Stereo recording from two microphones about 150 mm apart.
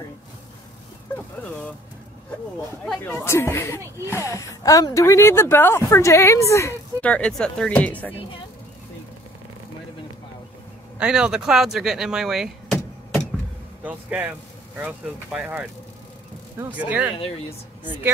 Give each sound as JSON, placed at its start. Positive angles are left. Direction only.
{"t": 2.8, "sound": "a woman's voice", "side_deg": 10}
{"t": 7.0, "sound": "speech", "side_deg": 10}
{"t": 11.0, "sound": "speech", "side_deg": -5}
{"t": 13.8, "sound": "speech", "side_deg": -10}